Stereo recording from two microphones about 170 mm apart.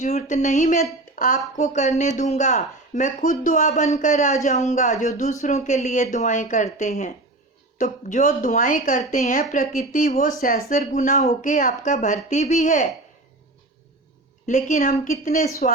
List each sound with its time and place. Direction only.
0.0 s speech: 40° left (ahead or behind)
14.4 s speech: 45° left (ahead or behind)